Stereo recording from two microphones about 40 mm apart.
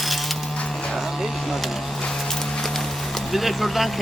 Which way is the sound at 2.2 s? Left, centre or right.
Centre.